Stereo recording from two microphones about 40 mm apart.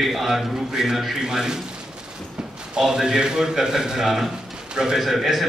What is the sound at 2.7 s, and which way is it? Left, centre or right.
A man's voice, centre.